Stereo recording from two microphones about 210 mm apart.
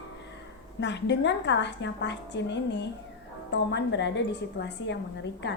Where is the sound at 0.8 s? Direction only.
55° left (ahead or behind).